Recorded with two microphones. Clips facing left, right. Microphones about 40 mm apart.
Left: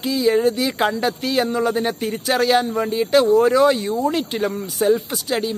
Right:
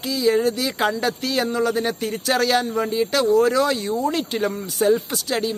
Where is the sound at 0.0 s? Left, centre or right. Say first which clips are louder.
Left 2 dB; centre.